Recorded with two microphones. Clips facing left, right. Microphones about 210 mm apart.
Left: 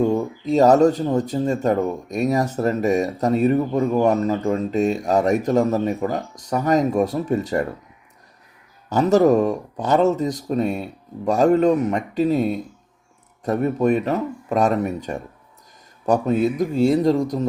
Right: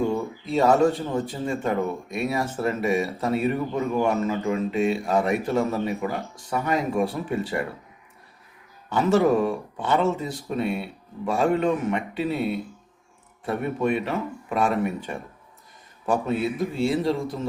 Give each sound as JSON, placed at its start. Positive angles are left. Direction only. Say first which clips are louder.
{"t": 0.0, "sound": "speech", "louder": "left 5 dB", "side_deg": 40}
{"t": 8.9, "sound": "speech", "louder": "left 4 dB", "side_deg": 40}